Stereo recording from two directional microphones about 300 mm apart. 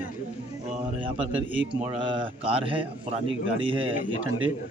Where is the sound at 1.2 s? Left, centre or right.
Centre.